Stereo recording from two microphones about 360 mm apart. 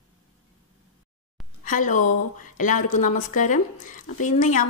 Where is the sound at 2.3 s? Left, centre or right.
Left.